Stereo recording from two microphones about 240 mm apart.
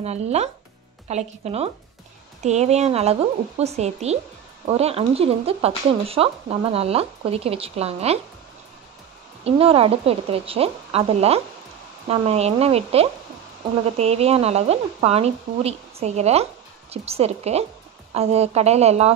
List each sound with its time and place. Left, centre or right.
0.0 s speech: right
9.4 s speech: right